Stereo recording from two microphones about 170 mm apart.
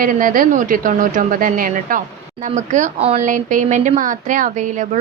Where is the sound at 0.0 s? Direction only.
55° right (ahead or behind).